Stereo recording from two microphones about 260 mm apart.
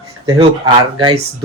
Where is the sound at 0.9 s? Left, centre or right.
Centre.